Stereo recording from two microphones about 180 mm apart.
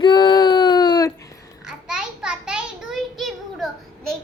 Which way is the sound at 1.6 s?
5° right (ahead or behind).